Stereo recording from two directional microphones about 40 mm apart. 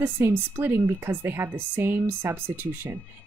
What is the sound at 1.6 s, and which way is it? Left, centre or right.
Speech, right.